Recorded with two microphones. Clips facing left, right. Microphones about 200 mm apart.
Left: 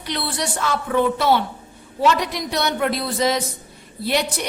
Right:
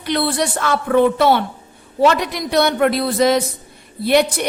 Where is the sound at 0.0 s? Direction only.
55° right (ahead or behind).